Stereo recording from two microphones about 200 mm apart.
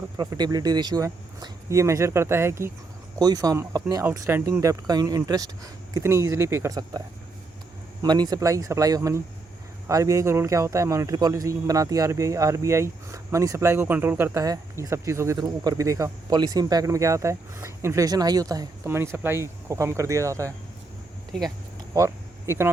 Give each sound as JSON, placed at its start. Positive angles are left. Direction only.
{"t": 0.2, "sound": "a man's voice", "side_deg": -20}
{"t": 8.0, "sound": "a man's voice", "side_deg": -20}
{"t": 21.9, "sound": "speech", "side_deg": -15}